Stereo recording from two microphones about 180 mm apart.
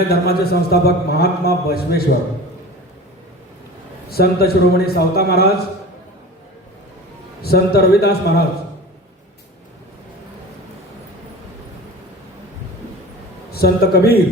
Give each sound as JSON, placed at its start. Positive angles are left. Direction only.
{"t": 0.1, "sound": "a man's voice", "side_deg": 60}
{"t": 4.1, "sound": "a man's voice", "side_deg": 60}
{"t": 7.4, "sound": "a man's voice", "side_deg": 60}
{"t": 13.5, "sound": "a man's voice", "side_deg": 60}